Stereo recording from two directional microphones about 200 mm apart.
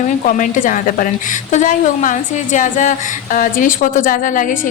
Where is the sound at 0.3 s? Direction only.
40° left (ahead or behind).